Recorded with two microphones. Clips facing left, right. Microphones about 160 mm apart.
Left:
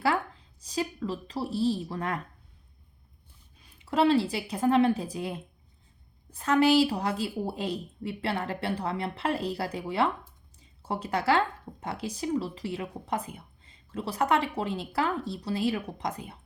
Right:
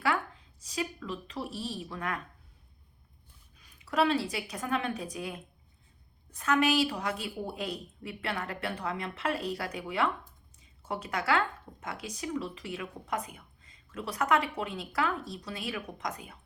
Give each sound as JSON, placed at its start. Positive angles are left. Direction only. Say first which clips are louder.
{"t": 0.0, "sound": "speech", "louder": "left 3 dB", "side_deg": 30}
{"t": 3.6, "sound": "a woman's voice", "louder": "left 3 dB", "side_deg": 30}